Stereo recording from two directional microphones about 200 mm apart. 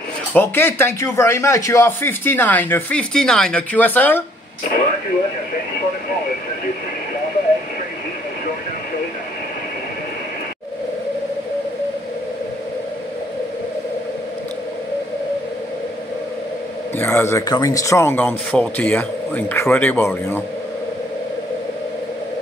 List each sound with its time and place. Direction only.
0.3 s speech: 10° left (ahead or behind)
17.0 s speech: 10° left (ahead or behind)